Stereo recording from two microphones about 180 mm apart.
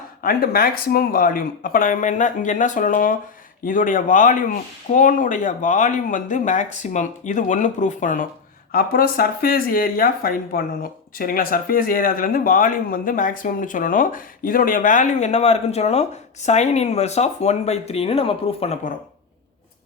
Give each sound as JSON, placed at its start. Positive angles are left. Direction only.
{"t": 0.2, "sound": "speech", "side_deg": 55}